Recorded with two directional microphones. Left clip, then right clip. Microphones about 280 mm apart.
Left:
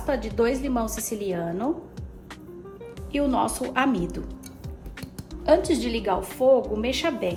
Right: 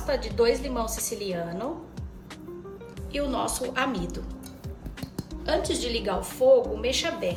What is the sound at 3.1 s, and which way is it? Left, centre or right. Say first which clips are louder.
Speech: left 4 dB; centre.